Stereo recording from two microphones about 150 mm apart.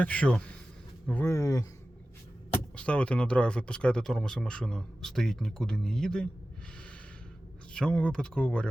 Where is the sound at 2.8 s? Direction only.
10° left (ahead or behind).